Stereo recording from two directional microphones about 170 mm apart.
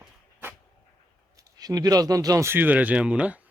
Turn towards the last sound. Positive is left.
turn(degrees=-5)  # may be behind; listen again after turning